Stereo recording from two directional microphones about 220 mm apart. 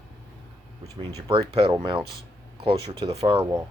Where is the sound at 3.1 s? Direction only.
25° right (ahead or behind).